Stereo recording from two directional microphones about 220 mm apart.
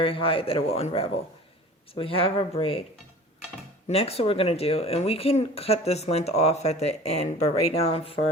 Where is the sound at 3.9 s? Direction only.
25° left (ahead or behind).